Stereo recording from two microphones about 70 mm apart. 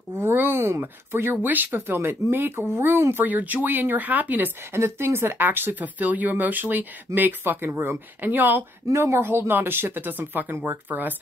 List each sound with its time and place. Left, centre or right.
0.2 s a sound: right
1.4 s speech: right
4.7 s speech: right
8.8 s speech: right